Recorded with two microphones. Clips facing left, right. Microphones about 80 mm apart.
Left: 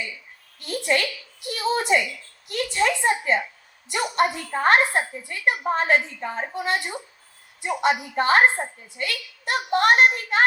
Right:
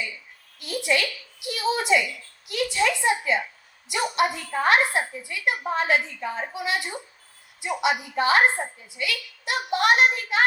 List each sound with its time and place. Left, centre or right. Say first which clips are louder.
0.6 s a woman's voice: left 1 dB; left